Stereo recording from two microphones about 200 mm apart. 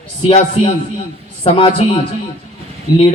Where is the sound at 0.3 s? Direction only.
30° left (ahead or behind).